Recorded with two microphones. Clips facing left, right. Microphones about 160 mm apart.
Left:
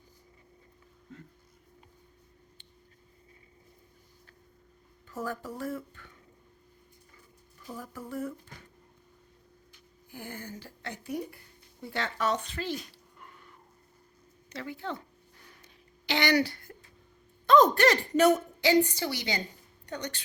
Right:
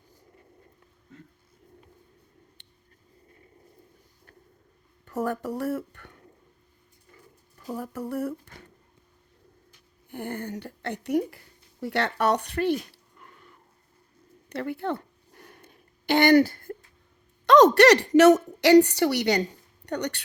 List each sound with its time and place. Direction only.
5.0 s speech: 65° right (ahead or behind)
7.7 s speech: 70° right (ahead or behind)
10.1 s a woman's voice: 60° right (ahead or behind)
14.5 s a sound: 60° right (ahead or behind)
17.4 s a woman's voice: 80° right